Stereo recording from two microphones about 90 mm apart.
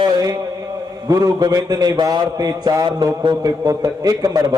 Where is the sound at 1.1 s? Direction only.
40° right (ahead or behind).